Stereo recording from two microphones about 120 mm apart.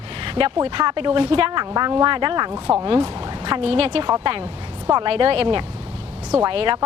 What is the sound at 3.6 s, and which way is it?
Speech, 55° right (ahead or behind).